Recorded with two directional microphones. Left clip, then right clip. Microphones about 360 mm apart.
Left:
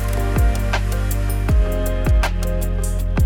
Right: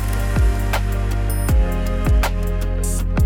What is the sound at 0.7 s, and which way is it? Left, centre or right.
Music, centre.